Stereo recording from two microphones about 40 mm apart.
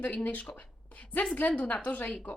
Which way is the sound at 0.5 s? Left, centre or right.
Left.